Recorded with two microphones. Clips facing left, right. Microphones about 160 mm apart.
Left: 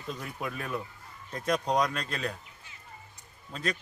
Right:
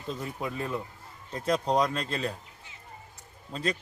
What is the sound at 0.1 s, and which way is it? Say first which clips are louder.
Speech: right 2 dB; 25° right (ahead or behind).